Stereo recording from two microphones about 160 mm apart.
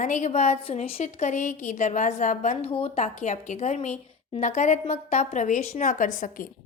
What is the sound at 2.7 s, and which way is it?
A woman's voice, 40° left (ahead or behind).